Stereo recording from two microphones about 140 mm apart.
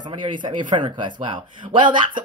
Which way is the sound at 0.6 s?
35° right (ahead or behind).